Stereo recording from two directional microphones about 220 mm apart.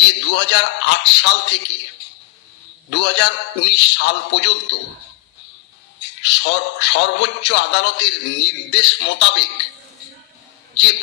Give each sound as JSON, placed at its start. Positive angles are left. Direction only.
{"t": 0.1, "sound": "a man's voice", "side_deg": 55}
{"t": 2.9, "sound": "a man's voice", "side_deg": 55}
{"t": 6.0, "sound": "a man's voice", "side_deg": 55}